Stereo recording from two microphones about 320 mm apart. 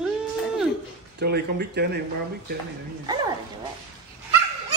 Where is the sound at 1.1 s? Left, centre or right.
Right.